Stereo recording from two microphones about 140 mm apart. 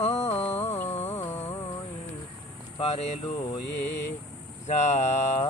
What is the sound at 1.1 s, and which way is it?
Music, 15° left (ahead or behind).